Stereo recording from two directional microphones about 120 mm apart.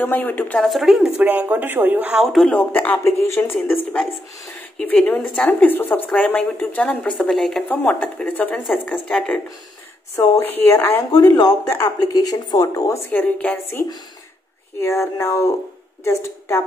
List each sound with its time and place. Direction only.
0.0 s a woman's voice: 15° left (ahead or behind)
0.6 s speech: centre (ahead or behind)
1.2 s speech: 15° right (ahead or behind)
2.5 s a woman's voice: 15° left (ahead or behind)
7.6 s a woman's voice: 15° left (ahead or behind)
10.1 s a woman's voice: 20° left (ahead or behind)
11.1 s speech: 35° left (ahead or behind)
13.1 s a woman's voice: 15° left (ahead or behind)